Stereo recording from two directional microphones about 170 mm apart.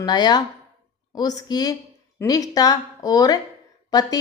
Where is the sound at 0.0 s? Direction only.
25° left (ahead or behind).